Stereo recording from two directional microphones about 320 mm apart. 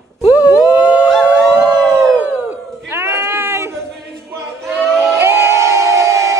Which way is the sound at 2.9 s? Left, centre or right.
Centre.